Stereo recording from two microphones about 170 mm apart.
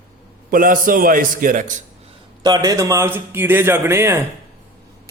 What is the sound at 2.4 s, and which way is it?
A man's voice, 20° right (ahead or behind).